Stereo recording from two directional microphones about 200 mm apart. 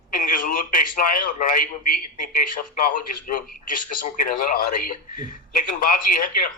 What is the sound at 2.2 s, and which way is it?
Speech, 40° left (ahead or behind).